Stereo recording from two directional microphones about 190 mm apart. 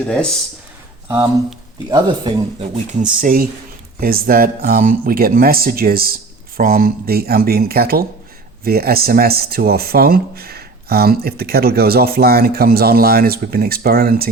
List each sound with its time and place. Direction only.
0.0 s speech: 5° left (ahead or behind)
1.0 s speech: 15° right (ahead or behind)
3.2 s speech: 45° right (ahead or behind)